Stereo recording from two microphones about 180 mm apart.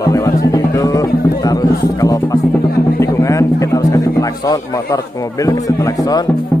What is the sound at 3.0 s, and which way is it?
Speech, 15° left (ahead or behind).